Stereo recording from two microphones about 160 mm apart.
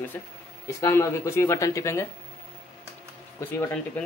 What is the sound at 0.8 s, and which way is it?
Speech, 15° left (ahead or behind).